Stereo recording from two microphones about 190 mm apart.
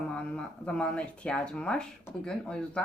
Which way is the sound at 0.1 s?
5° left (ahead or behind).